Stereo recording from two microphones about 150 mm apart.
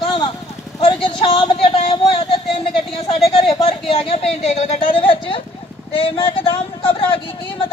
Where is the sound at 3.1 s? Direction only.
40° left (ahead or behind).